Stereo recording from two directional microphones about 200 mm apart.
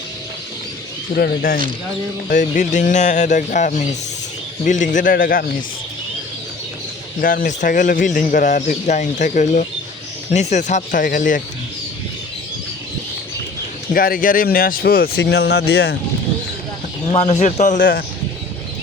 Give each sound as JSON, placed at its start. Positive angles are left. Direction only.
{"t": 1.1, "sound": "speech", "side_deg": 50}
{"t": 7.2, "sound": "speech", "side_deg": 45}
{"t": 13.9, "sound": "speech", "side_deg": 45}
{"t": 17.1, "sound": "speech", "side_deg": 30}